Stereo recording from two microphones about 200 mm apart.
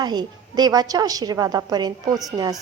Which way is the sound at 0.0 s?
20° right (ahead or behind).